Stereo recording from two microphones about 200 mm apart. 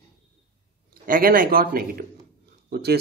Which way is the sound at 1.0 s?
45° right (ahead or behind).